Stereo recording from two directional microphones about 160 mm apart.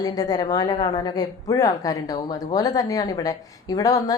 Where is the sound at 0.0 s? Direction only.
25° left (ahead or behind).